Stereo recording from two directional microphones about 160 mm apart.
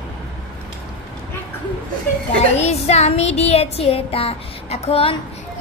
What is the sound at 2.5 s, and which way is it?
Child singing, 40° left (ahead or behind).